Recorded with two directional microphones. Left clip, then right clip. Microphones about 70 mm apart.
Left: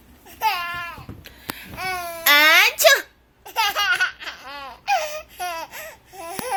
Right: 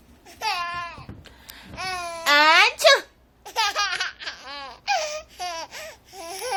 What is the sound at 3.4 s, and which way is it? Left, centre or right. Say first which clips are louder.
Laughter: left 2 dB; centre.